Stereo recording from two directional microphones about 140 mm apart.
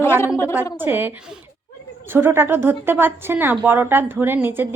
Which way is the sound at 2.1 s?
15° right (ahead or behind).